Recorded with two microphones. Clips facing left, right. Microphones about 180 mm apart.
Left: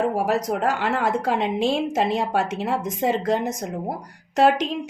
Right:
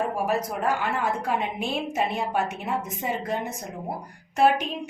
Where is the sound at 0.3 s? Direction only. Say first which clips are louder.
Left 3 dB; 90° left.